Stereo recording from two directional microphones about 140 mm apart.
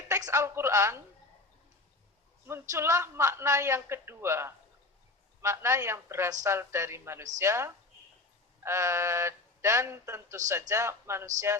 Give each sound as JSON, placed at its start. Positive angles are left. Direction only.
{"t": 0.1, "sound": "a woman's voice", "side_deg": -20}
{"t": 2.5, "sound": "a woman's voice", "side_deg": -20}